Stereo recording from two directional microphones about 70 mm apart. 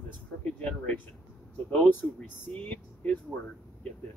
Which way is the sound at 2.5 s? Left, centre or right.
Centre.